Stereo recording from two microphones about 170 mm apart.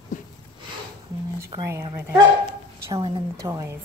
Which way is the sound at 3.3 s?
20° right (ahead or behind).